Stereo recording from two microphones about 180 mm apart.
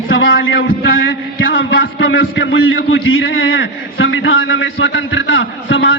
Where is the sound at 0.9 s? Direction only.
90° left.